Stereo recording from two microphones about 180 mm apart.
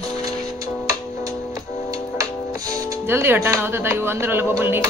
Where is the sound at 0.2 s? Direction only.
20° right (ahead or behind).